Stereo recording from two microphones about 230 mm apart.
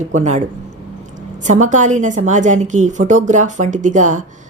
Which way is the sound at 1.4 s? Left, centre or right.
Right.